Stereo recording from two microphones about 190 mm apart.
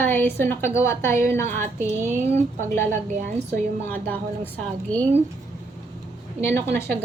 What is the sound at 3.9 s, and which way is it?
A woman's voice, 10° left (ahead or behind).